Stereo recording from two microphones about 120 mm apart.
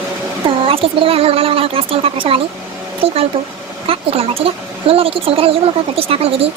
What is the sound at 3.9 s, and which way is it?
Speech, 55° right (ahead or behind).